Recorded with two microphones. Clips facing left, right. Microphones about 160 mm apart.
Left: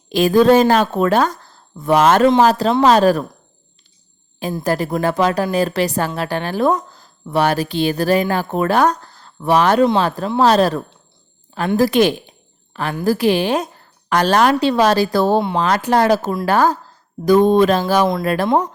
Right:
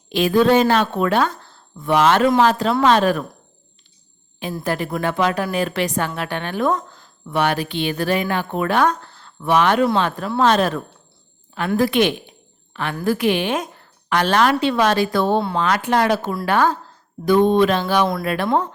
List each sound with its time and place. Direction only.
0.1 s a woman's voice: 40° left (ahead or behind)
4.6 s a woman's voice: 40° left (ahead or behind)
18.4 s speech: 20° left (ahead or behind)